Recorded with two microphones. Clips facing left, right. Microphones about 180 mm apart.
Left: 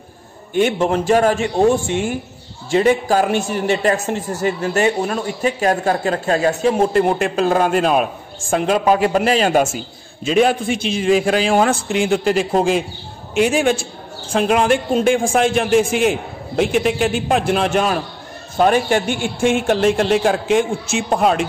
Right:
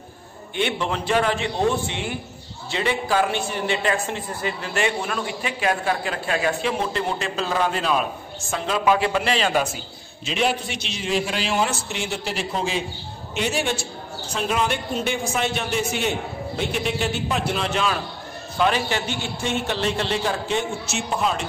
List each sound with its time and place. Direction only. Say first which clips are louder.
0.6 s a woman's voice: left 8 dB; 45° left (ahead or behind)
11.9 s a man's voice: left 12 dB; 90° left
12.3 s a woman's voice: left 8 dB; 50° left (ahead or behind)
14.3 s a woman's voice: left 9 dB; 50° left (ahead or behind)
15.4 s a man's voice: left 10 dB; 90° left
17.3 s a woman's voice: left 8 dB; 50° left (ahead or behind)
19.2 s speech: left 9 dB; 10° left (ahead or behind)
19.6 s a woman's voice: left 9 dB; 50° left (ahead or behind)